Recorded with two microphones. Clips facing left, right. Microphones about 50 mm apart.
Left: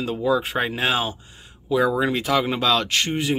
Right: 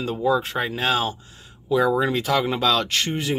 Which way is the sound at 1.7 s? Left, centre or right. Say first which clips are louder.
Even; centre.